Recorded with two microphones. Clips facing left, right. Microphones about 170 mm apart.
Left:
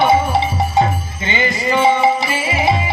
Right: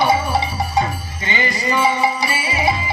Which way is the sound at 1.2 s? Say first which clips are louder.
Left 3 dB; 20° left (ahead or behind).